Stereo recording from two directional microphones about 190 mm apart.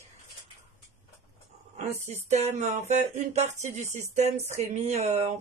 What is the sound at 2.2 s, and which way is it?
Speech, 35° right (ahead or behind).